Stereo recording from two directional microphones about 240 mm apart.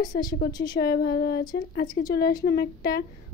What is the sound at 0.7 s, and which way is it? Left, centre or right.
A woman's voice, left.